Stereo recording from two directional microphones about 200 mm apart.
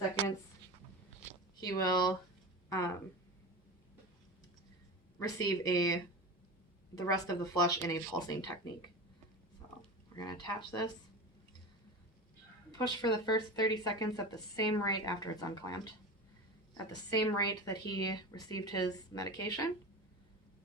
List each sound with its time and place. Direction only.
1.6 s speech: 15° left (ahead or behind)
5.4 s speech: 20° left (ahead or behind)
7.0 s a woman's voice: 15° left (ahead or behind)
10.2 s a woman's voice: 20° left (ahead or behind)
12.8 s a woman's voice: 20° left (ahead or behind)
16.9 s a woman's voice: 20° left (ahead or behind)